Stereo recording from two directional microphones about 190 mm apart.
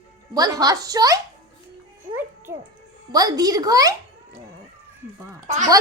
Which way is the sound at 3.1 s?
20° right (ahead or behind).